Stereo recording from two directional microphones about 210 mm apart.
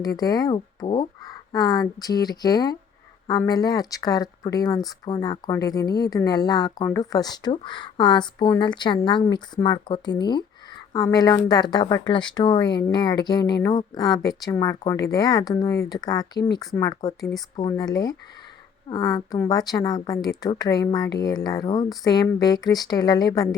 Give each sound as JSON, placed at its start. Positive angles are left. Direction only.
{"t": 0.2, "sound": "a woman's voice", "side_deg": 20}